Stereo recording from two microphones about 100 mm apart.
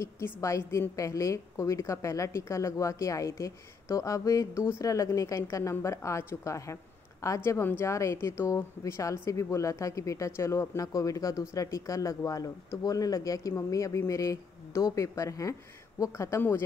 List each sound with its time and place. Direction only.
0.0 s a woman's voice: 30° left (ahead or behind)